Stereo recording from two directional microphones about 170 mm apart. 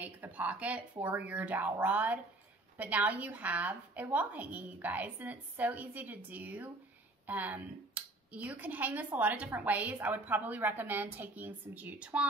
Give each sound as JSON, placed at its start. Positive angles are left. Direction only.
{"t": 0.0, "sound": "speech", "side_deg": -10}